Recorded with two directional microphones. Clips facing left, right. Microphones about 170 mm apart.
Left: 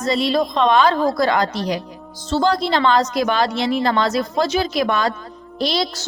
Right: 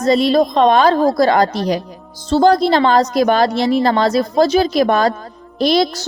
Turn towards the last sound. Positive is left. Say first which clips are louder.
# right 7 dB
turn(degrees=-50)  # may be behind; listen again after turning